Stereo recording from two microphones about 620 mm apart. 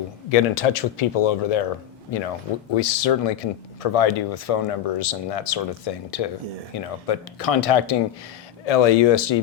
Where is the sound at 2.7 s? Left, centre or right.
Left.